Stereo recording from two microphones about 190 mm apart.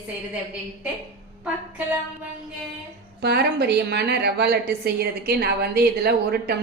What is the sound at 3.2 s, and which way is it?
A woman's voice, 60° right (ahead or behind).